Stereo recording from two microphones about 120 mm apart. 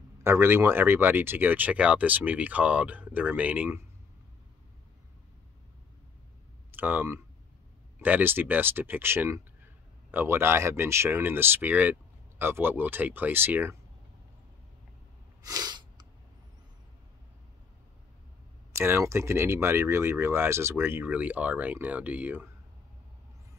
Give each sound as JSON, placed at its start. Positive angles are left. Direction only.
{"t": 0.2, "sound": "speech", "side_deg": -20}
{"t": 6.7, "sound": "speech", "side_deg": -15}
{"t": 15.4, "sound": "a sound", "side_deg": -35}
{"t": 18.7, "sound": "speech", "side_deg": -20}